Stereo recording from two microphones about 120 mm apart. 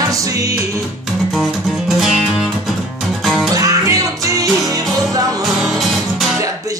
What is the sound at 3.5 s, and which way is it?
Music, 30° right (ahead or behind).